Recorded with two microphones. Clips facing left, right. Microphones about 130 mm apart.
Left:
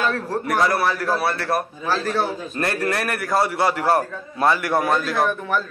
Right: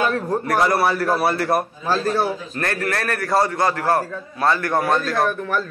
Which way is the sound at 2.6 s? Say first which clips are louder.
Left 1 dB; 15° left (ahead or behind).